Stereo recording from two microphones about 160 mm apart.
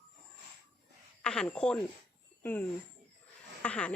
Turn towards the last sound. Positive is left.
turn(degrees=10)  # may be behind; listen again after turning